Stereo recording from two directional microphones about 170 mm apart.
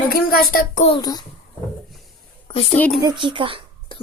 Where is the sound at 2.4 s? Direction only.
35° left (ahead or behind).